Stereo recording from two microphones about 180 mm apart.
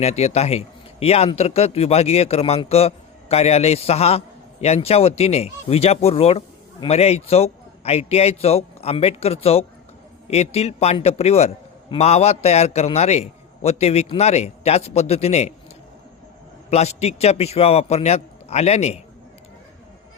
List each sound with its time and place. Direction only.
0.0 s a man's voice: 35° left (ahead or behind)
16.6 s a man's voice: 35° left (ahead or behind)